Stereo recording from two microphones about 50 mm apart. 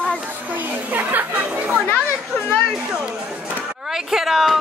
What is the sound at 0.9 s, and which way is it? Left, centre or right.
Chatter, right.